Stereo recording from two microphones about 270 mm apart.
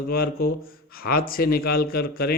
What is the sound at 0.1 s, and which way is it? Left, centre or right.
Speech, left.